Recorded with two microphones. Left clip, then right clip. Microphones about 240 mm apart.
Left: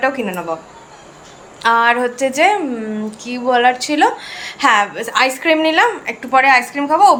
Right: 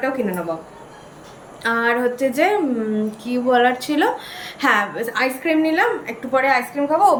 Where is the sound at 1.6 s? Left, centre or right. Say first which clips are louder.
Left 6 dB; centre.